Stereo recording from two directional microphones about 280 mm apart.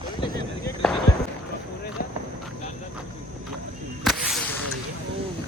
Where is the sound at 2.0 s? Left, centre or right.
Left.